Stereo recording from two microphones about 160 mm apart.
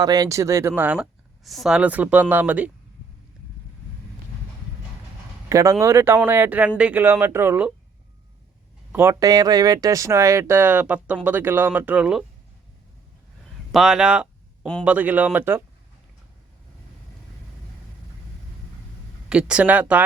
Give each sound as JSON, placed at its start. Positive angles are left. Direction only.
{"t": 0.0, "sound": "speech", "side_deg": -25}
{"t": 0.8, "sound": "speech", "side_deg": -10}
{"t": 5.5, "sound": "speech", "side_deg": -20}
{"t": 8.9, "sound": "speech", "side_deg": -15}
{"t": 13.7, "sound": "a sound", "side_deg": -5}
{"t": 14.8, "sound": "speech", "side_deg": -10}
{"t": 19.3, "sound": "speech", "side_deg": -5}